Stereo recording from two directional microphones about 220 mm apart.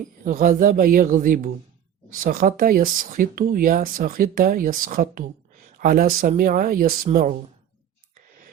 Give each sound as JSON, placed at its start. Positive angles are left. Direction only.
{"t": 0.0, "sound": "speech", "side_deg": -40}